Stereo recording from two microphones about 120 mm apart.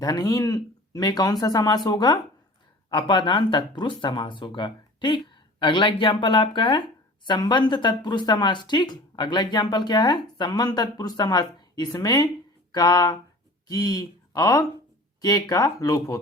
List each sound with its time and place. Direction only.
0.0 s speech: 35° left (ahead or behind)